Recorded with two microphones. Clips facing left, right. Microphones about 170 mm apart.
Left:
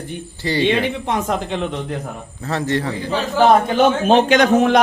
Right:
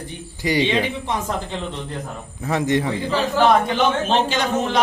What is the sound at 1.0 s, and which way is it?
Speech, 65° left (ahead or behind).